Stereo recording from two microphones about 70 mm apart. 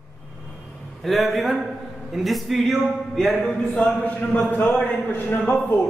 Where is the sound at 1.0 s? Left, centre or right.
Centre.